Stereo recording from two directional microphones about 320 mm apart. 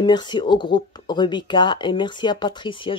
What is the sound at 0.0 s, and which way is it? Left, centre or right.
Speech, centre.